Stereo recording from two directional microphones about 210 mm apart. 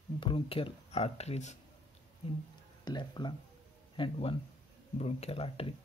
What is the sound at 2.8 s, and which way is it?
Speech, 20° left (ahead or behind).